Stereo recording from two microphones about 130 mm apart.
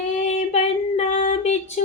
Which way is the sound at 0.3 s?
60° left (ahead or behind).